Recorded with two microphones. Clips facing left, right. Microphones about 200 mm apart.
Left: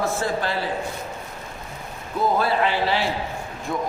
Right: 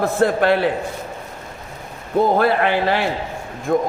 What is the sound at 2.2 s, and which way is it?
A man's voice, 60° right (ahead or behind).